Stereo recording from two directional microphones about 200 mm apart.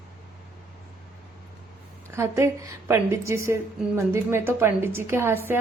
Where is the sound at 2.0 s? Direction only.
15° right (ahead or behind).